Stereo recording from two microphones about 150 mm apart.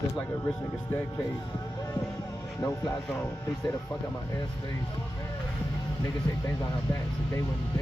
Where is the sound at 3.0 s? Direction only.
10° left (ahead or behind); by 5.0 s 30° left (ahead or behind).